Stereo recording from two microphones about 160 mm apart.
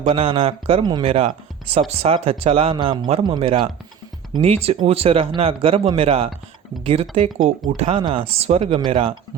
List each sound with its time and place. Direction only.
0.0 s speech: 40° right (ahead or behind)